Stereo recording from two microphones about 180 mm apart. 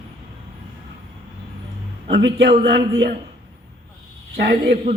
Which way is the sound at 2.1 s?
65° right (ahead or behind).